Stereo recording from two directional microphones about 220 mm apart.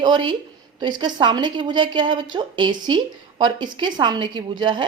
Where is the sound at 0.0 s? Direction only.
20° right (ahead or behind).